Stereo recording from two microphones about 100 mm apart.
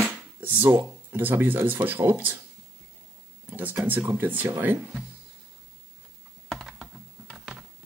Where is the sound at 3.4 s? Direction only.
20° right (ahead or behind).